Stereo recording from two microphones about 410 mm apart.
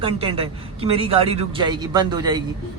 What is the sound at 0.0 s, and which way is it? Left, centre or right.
Speech, centre.